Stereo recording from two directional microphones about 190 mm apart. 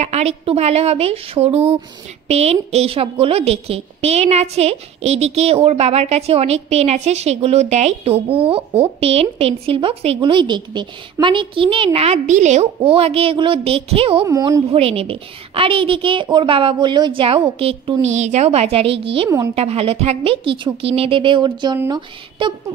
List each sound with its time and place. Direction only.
0.0 s a woman's voice: 35° right (ahead or behind)
14.2 s speech: 15° right (ahead or behind)
14.7 s a woman's voice: 30° right (ahead or behind)
19.5 s a woman's voice: 35° right (ahead or behind)